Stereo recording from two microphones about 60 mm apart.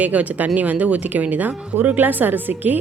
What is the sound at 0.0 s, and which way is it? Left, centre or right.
Speech, right.